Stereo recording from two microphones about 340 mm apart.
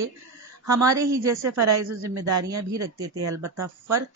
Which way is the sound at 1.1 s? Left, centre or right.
Right.